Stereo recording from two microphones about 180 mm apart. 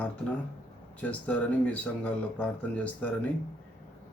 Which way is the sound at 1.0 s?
10° left (ahead or behind).